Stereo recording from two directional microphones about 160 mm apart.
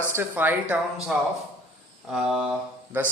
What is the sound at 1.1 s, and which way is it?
Speech, centre (ahead or behind).